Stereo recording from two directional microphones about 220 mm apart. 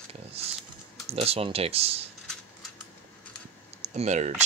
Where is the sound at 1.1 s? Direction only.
25° right (ahead or behind).